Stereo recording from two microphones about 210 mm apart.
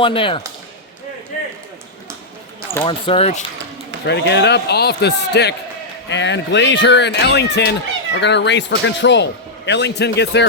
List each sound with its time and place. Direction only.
0.0 s speech: 25° left (ahead or behind)
2.8 s speech: 30° left (ahead or behind)
4.0 s speech: 55° left (ahead or behind)